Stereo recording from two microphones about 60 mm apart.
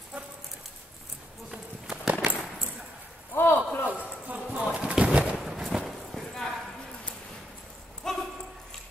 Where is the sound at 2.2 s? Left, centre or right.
Right.